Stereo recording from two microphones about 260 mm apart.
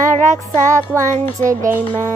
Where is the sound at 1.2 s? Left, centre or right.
Right.